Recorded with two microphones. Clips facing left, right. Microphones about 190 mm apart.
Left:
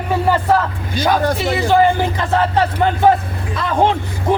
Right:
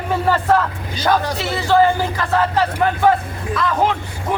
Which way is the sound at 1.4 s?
15° left (ahead or behind).